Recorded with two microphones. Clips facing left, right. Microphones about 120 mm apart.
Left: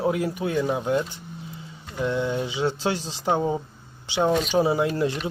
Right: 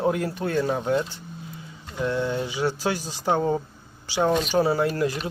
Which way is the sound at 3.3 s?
10° left (ahead or behind).